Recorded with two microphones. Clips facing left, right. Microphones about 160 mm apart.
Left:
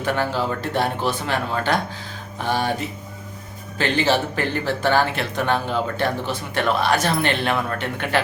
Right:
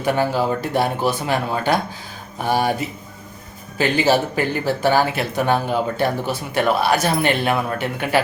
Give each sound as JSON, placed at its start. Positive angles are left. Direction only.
{"t": 0.0, "sound": "speech", "side_deg": -10}
{"t": 3.8, "sound": "speech", "side_deg": -10}